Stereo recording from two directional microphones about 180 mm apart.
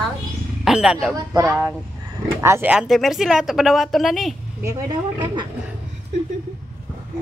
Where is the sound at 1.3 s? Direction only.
15° right (ahead or behind); by 4.3 s centre (ahead or behind).